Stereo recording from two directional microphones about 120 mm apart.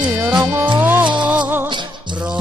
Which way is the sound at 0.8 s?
15° right (ahead or behind).